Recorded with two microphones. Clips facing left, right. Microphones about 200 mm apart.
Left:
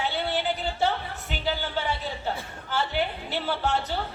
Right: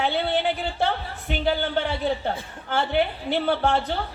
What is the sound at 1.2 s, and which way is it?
A man's voice, 55° right (ahead or behind).